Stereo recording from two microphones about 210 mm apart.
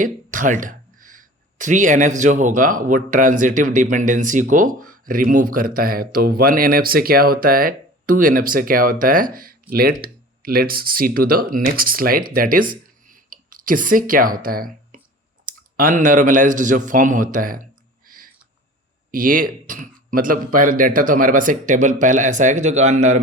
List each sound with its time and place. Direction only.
0.0 s a man's voice: 40° right (ahead or behind)